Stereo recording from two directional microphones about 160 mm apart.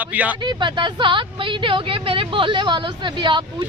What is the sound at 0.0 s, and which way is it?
Speech, 10° right (ahead or behind).